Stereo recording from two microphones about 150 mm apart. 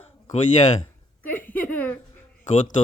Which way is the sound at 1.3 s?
10° left (ahead or behind).